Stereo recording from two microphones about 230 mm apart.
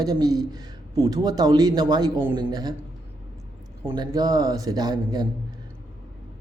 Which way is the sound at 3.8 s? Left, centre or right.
Centre.